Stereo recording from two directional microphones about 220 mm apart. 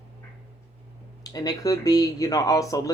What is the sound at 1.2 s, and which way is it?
Speech, 15° left (ahead or behind).